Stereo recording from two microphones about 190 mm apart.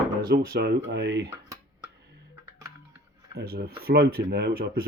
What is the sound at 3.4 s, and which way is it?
Speech, 55° right (ahead or behind).